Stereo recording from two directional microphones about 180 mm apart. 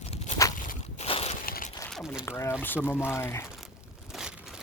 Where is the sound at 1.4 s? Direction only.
55° left (ahead or behind).